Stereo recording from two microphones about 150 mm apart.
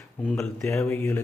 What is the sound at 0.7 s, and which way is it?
Speech, 15° left (ahead or behind).